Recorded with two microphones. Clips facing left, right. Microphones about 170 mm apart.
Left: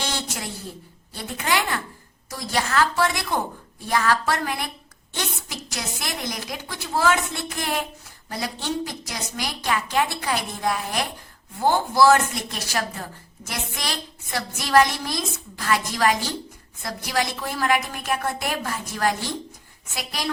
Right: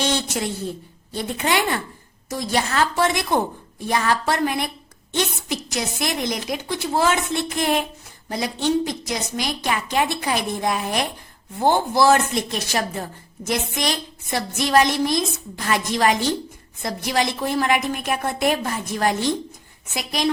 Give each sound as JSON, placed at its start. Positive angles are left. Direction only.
{"t": 0.0, "sound": "a sound", "side_deg": -20}
{"t": 1.1, "sound": "a woman's voice", "side_deg": -20}
{"t": 8.3, "sound": "a woman's voice", "side_deg": -20}